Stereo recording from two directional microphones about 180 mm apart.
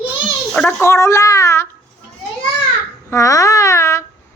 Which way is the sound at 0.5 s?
10° left (ahead or behind).